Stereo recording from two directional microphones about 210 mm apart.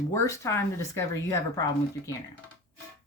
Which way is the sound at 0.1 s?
15° left (ahead or behind).